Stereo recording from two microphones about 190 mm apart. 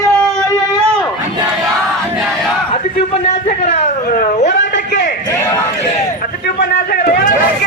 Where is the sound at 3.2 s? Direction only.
35° left (ahead or behind).